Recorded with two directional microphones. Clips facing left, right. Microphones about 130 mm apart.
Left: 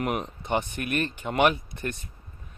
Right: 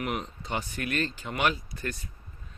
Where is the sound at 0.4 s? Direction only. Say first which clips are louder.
Left 7 dB; 20° left (ahead or behind).